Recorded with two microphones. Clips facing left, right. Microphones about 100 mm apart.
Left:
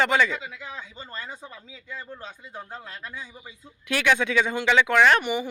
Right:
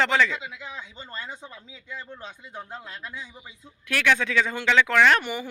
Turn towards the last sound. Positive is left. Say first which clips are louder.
# left 1 dB
turn(degrees=10)  # may be behind; listen again after turning